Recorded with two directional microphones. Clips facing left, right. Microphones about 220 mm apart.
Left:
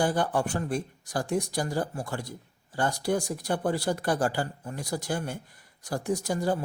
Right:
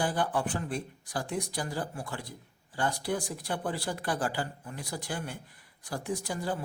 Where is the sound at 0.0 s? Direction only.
45° left (ahead or behind).